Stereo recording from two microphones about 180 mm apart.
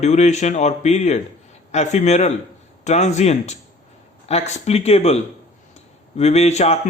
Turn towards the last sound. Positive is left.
turn(degrees=40)  # may be behind; listen again after turning